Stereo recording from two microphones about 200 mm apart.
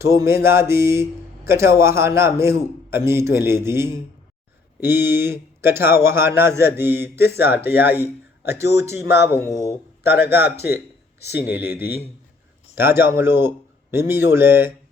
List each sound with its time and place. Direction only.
0.0 s a man's voice: 15° right (ahead or behind)